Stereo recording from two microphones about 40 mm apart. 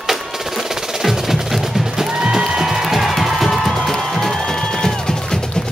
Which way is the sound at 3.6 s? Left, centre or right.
Centre.